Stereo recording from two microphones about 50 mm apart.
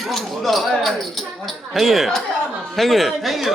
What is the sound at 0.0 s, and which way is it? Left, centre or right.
Speech, centre.